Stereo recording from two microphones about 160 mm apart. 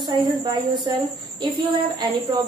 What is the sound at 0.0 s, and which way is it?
A woman's voice, 25° right (ahead or behind).